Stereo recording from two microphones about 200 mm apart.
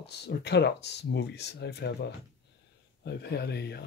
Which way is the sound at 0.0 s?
55° left (ahead or behind).